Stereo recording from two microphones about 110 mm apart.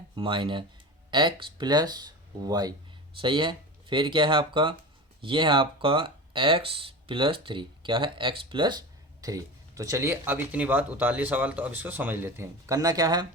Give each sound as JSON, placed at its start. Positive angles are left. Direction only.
{"t": 0.2, "sound": "speech", "side_deg": -50}
{"t": 3.2, "sound": "speech", "side_deg": -50}
{"t": 9.2, "sound": "speech", "side_deg": -30}